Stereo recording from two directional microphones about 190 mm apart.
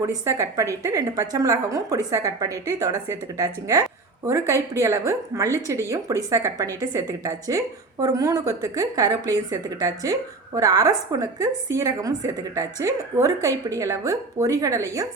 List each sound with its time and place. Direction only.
0.0 s a woman's voice: 15° right (ahead or behind)